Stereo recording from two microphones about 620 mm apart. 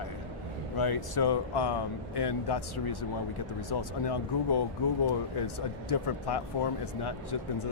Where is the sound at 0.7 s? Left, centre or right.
Left.